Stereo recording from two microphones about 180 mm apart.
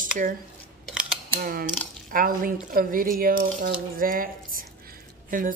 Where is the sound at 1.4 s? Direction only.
55° right (ahead or behind).